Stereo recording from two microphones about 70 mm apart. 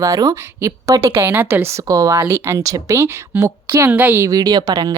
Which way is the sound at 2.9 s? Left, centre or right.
Right.